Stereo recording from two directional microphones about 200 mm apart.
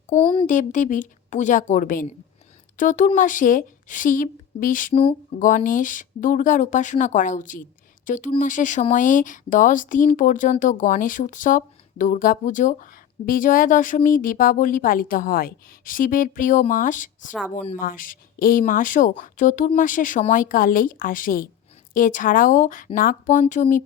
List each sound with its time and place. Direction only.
0.1 s a sound: 35° left (ahead or behind)
0.4 s speech: 40° left (ahead or behind)
17.7 s speech: 45° left (ahead or behind)